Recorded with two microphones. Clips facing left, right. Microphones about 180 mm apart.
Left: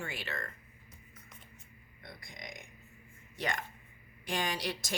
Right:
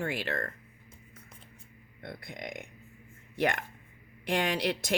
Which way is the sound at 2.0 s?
60° right (ahead or behind).